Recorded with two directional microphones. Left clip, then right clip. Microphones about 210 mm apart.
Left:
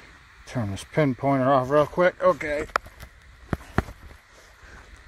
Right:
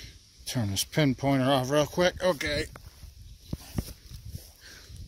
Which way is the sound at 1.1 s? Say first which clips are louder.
Left 7 dB; 40° right (ahead or behind).